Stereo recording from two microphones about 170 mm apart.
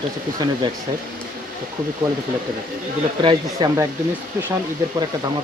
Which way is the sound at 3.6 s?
25° right (ahead or behind).